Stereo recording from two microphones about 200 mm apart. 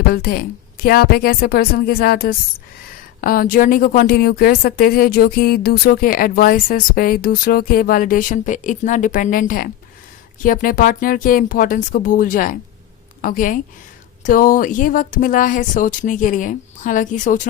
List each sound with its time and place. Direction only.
0.1 s a woman's voice: 50° left (ahead or behind)